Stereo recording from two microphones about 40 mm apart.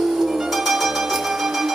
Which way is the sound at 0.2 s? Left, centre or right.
Centre.